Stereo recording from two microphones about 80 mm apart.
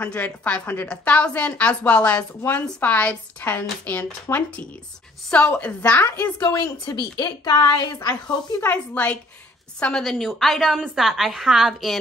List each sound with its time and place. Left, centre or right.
0.0 s speech: centre
0.8 s a woman's voice: centre
6.4 s a woman's voice: left
8.6 s a woman's voice: centre